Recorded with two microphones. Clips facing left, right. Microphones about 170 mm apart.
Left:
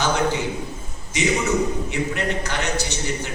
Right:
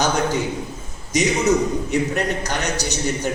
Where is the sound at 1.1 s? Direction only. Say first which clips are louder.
Right 3 dB; 40° right (ahead or behind).